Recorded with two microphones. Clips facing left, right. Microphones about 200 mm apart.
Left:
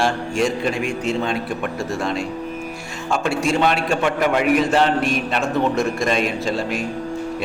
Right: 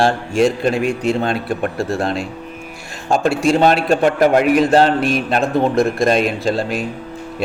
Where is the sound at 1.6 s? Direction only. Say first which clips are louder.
Right 6 dB; 35° right (ahead or behind).